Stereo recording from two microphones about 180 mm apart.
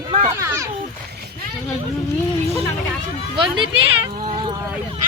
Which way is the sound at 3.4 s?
30° right (ahead or behind).